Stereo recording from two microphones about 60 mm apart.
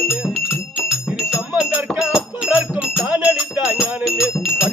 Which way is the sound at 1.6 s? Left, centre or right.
Right.